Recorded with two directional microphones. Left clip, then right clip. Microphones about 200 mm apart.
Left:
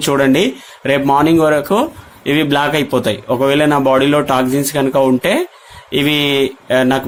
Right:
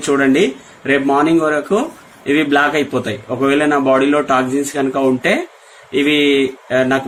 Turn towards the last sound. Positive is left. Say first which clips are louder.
# left 2 dB
turn(degrees=55)  # may be behind; listen again after turning